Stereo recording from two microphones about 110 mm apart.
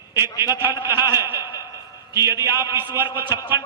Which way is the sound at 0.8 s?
25° right (ahead or behind).